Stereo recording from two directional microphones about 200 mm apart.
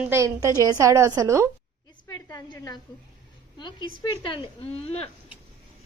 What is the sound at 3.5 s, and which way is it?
Speech, 20° left (ahead or behind).